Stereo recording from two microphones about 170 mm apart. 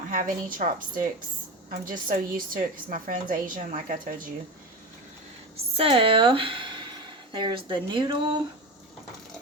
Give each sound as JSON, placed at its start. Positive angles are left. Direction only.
{"t": 0.1, "sound": "a woman's voice", "side_deg": -55}
{"t": 5.7, "sound": "speech", "side_deg": -35}